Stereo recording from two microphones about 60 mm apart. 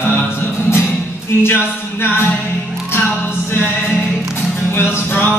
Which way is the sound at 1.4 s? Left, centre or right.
Left.